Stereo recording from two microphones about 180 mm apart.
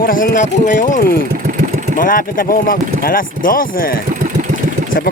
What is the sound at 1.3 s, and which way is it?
Vehicle, 50° right (ahead or behind).